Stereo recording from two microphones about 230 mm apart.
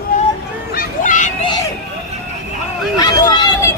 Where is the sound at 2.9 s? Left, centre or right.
Centre.